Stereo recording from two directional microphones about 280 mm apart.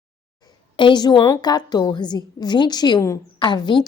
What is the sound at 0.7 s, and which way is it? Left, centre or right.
A woman's voice, centre.